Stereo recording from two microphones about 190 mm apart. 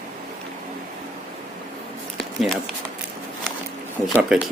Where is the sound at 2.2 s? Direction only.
Centre (ahead or behind).